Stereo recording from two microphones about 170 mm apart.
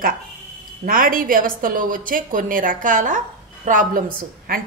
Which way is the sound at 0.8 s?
55° right (ahead or behind).